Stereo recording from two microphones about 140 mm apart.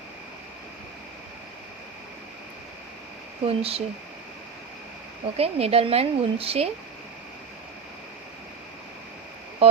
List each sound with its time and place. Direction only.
3.4 s a woman's voice: 45° right (ahead or behind)
5.4 s a woman's voice: 45° right (ahead or behind)